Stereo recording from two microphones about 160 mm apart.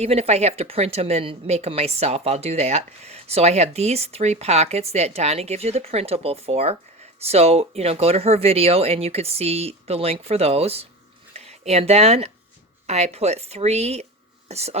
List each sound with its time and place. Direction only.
0.0 s speech: 40° right (ahead or behind)